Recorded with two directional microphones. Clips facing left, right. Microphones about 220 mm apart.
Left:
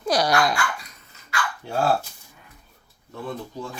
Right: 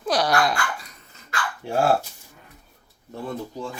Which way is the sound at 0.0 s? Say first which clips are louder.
Left 1 dB; centre (ahead or behind).